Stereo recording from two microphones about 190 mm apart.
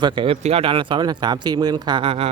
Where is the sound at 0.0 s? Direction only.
25° right (ahead or behind).